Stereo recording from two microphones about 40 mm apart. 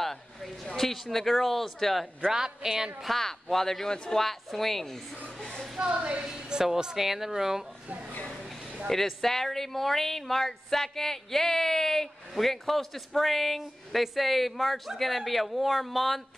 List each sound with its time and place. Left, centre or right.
0.0 s a sound: centre
1.0 s speech: centre
2.2 s speech: centre
3.2 s a man's voice: centre
5.4 s a sound: centre
5.9 s a woman's voice: right
6.6 s speech: centre
8.8 s speech: centre